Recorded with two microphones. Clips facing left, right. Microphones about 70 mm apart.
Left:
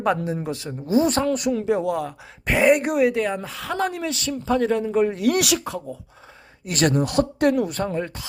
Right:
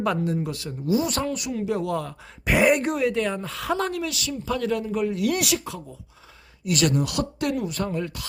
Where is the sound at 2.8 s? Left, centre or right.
Centre.